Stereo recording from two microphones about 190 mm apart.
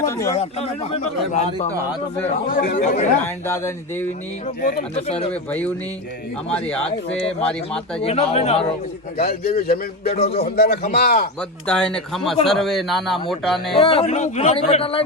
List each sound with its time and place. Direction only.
0.0 s a sound: 15° left (ahead or behind)
0.3 s a man's voice: 35° left (ahead or behind)
2.5 s a man's voice: 50° left (ahead or behind)
3.4 s speech: 15° left (ahead or behind)
5.3 s speech: 10° left (ahead or behind)
8.0 s a man's voice: 30° left (ahead or behind)
9.1 s a man's voice: 55° left (ahead or behind)
11.6 s speech: 5° left (ahead or behind)
13.7 s a man's voice: 30° left (ahead or behind)